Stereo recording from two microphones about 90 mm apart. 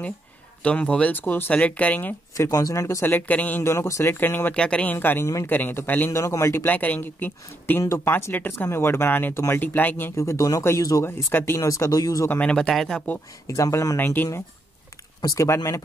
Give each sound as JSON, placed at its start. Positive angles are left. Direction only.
{"t": 0.7, "sound": "speech", "side_deg": 15}
{"t": 2.3, "sound": "speech", "side_deg": 40}
{"t": 3.1, "sound": "speech", "side_deg": 20}
{"t": 3.6, "sound": "speech", "side_deg": 35}
{"t": 4.1, "sound": "speech", "side_deg": 25}
{"t": 4.9, "sound": "speech", "side_deg": 25}
{"t": 5.2, "sound": "speech", "side_deg": 35}
{"t": 5.5, "sound": "speech", "side_deg": 20}
{"t": 6.1, "sound": "speech", "side_deg": 35}
{"t": 6.6, "sound": "speech", "side_deg": 20}
{"t": 12.3, "sound": "speech", "side_deg": 10}
{"t": 13.5, "sound": "speech", "side_deg": 35}
{"t": 13.9, "sound": "speech", "side_deg": 25}